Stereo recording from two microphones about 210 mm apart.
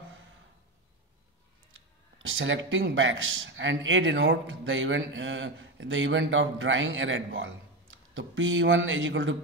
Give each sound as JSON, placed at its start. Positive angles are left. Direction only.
{"t": 2.2, "sound": "a man's voice", "side_deg": -65}